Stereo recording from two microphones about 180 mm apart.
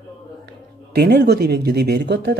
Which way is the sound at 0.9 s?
60° right (ahead or behind).